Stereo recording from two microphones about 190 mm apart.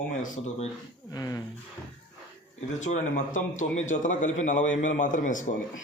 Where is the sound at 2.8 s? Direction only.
40° left (ahead or behind).